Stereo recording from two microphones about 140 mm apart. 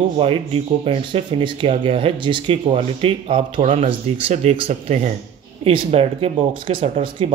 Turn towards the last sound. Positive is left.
turn(degrees=-40)  # may be behind; listen again after turning